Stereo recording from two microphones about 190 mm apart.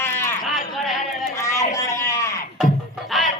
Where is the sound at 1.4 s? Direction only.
15° left (ahead or behind).